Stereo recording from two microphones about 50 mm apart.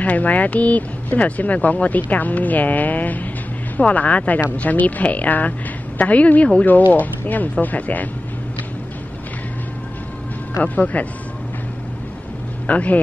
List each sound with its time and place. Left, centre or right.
0.0 s speech: left
10.6 s speech: left
12.6 s speech: left